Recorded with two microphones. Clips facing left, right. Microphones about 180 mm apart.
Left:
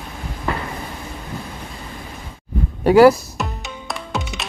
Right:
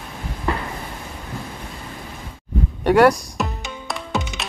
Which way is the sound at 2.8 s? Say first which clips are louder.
Left 4 dB; centre (ahead or behind).